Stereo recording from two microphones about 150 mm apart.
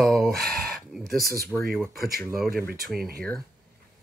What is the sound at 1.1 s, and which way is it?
Speech, 80° right.